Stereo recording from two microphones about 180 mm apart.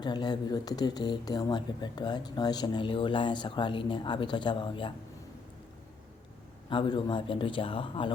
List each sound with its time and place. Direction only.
0.0 s speech: 25° left (ahead or behind)
6.7 s speech: 25° left (ahead or behind)